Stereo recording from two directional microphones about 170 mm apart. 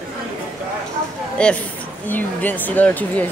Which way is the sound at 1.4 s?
5° left (ahead or behind).